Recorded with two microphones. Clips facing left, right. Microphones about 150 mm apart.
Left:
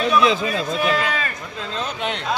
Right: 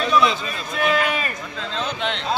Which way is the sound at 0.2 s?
90° left.